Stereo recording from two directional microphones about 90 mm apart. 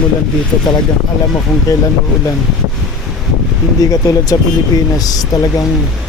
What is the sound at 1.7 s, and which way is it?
Speech, 40° left (ahead or behind).